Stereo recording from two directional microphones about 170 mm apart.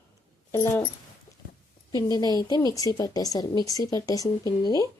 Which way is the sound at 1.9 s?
20° left (ahead or behind).